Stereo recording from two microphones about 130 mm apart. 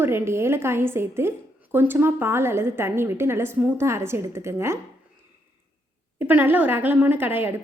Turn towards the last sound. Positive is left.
turn(degrees=-15)  # may be behind; listen again after turning